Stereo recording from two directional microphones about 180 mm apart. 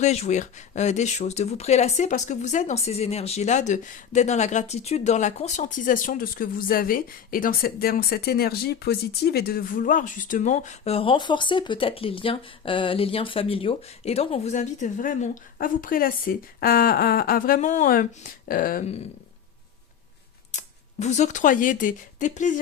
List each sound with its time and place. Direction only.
0.0 s speech: 40° left (ahead or behind)
20.5 s speech: 40° left (ahead or behind)